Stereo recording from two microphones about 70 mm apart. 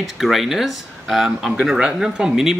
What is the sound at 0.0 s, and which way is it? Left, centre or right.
A man's voice, centre.